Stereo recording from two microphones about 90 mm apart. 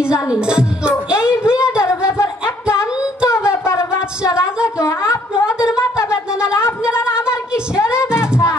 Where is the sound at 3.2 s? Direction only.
30° left (ahead or behind).